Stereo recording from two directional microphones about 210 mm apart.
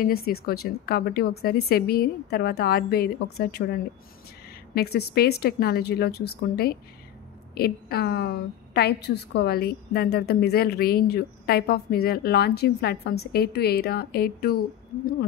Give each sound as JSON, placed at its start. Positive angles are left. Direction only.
{"t": 0.0, "sound": "a woman's voice", "side_deg": 45}